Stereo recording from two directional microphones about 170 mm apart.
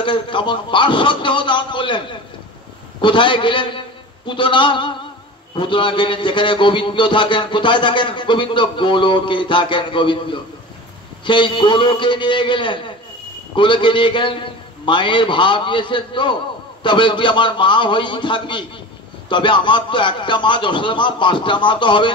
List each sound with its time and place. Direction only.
0.0 s a man's voice: 30° left (ahead or behind)